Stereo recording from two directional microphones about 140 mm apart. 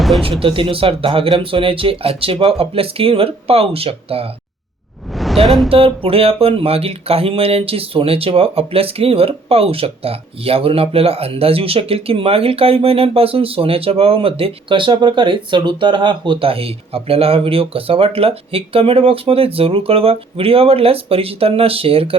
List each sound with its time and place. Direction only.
0.2 s speech: 40° right (ahead or behind)
5.1 s a sound: centre (ahead or behind)
5.6 s speech: 40° right (ahead or behind)